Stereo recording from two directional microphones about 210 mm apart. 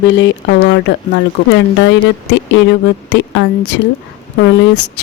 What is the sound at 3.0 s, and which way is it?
Speech, 60° left (ahead or behind).